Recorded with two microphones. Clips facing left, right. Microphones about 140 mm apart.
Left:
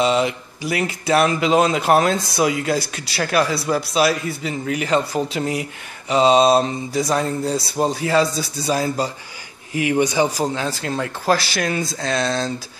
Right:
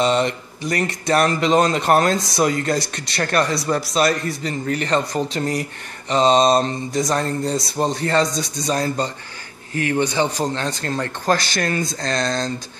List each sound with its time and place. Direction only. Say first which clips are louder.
0.0 s a man's voice: even; 5° left (ahead or behind)